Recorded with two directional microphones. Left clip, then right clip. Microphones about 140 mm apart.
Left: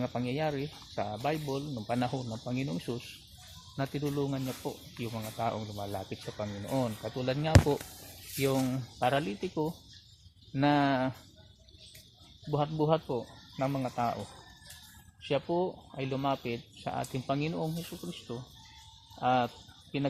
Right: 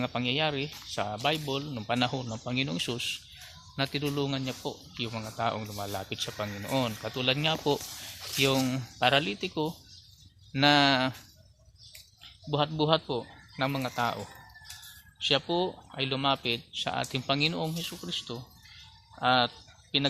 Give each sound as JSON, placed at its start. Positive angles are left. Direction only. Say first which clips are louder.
{"t": 0.0, "sound": "speech", "louder": "right 4 dB", "side_deg": -35}
{"t": 12.5, "sound": "speech", "louder": "right 3 dB", "side_deg": -35}
{"t": 15.3, "sound": "speech", "louder": "right 3 dB", "side_deg": -35}